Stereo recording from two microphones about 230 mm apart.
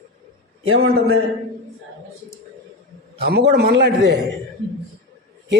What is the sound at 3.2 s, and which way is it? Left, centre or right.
A man's voice, right.